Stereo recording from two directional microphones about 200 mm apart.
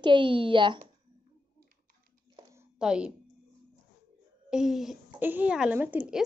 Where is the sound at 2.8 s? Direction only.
5° right (ahead or behind).